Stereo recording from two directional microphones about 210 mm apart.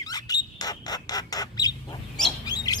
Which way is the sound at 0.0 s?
20° left (ahead or behind).